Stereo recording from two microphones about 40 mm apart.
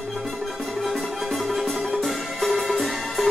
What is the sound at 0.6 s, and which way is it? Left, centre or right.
Music, centre.